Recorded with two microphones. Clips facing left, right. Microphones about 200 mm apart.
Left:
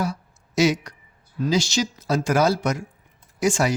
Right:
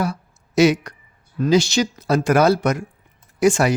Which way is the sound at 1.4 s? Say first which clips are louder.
Right 5 dB; 60° right (ahead or behind).